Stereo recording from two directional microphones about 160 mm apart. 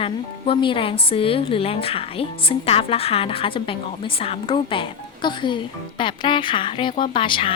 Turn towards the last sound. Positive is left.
turn(degrees=30)  # may be behind; listen again after turning